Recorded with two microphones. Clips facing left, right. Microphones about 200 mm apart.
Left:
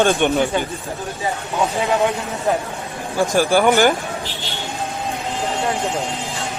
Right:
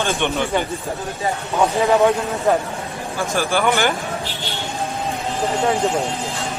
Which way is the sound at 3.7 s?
40° left (ahead or behind).